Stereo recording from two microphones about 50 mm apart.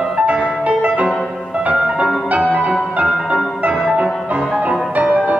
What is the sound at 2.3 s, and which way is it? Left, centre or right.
Music, right.